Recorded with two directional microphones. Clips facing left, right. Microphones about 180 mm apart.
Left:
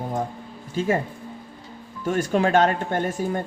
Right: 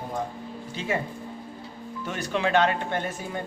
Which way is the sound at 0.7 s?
45° left (ahead or behind).